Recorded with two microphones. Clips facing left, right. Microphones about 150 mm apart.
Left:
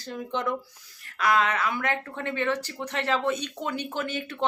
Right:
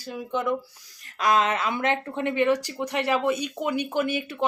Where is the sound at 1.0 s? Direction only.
20° right (ahead or behind).